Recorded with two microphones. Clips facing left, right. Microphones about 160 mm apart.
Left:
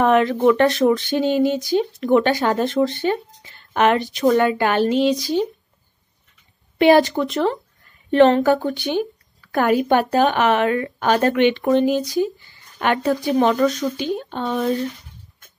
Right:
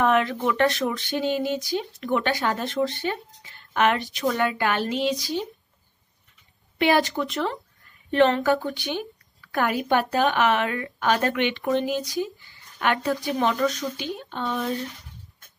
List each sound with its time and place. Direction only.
0.0 s speech: 35° left (ahead or behind)
6.8 s speech: 30° left (ahead or behind)